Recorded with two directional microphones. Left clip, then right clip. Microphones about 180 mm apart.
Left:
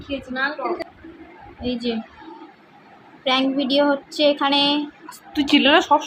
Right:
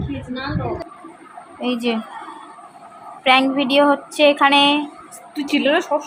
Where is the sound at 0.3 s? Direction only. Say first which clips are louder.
Left 3 dB; 55° left (ahead or behind).